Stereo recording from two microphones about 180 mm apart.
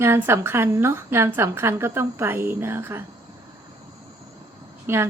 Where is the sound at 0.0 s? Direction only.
15° right (ahead or behind).